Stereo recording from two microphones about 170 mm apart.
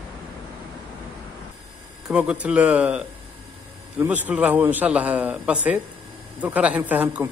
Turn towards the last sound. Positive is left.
turn(degrees=-10)  # may be behind; listen again after turning